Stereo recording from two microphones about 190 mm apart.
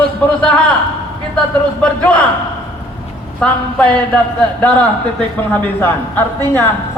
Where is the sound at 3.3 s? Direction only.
5° left (ahead or behind).